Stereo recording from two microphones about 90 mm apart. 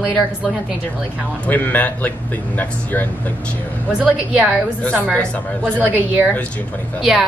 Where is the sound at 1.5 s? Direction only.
20° left (ahead or behind).